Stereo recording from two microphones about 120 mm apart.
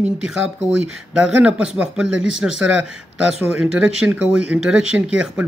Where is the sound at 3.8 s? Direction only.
5° right (ahead or behind).